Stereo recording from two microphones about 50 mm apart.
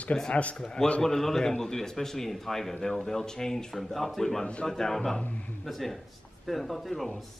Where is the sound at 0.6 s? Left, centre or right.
Centre.